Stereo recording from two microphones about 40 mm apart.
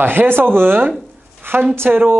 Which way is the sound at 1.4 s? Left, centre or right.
Right.